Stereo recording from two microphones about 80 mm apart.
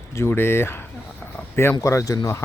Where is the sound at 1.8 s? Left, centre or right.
Left.